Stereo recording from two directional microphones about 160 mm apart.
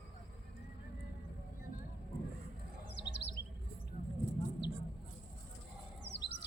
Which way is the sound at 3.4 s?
90° left.